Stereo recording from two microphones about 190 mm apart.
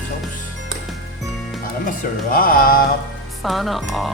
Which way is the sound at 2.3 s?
45° left (ahead or behind).